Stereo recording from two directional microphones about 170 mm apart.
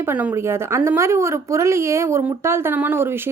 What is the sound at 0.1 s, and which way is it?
A woman's voice, 10° right (ahead or behind).